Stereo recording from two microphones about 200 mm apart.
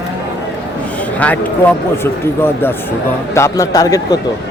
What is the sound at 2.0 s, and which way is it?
A man's voice, 10° left (ahead or behind).